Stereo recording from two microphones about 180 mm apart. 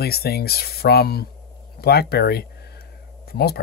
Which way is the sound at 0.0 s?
60° left (ahead or behind).